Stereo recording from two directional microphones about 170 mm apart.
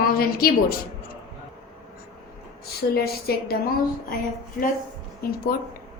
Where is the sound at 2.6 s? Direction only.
65° left (ahead or behind).